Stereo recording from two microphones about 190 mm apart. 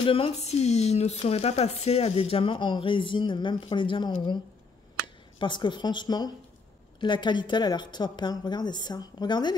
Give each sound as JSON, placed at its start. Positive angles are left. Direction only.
{"t": 0.0, "sound": "speech", "side_deg": 30}
{"t": 5.4, "sound": "speech", "side_deg": 25}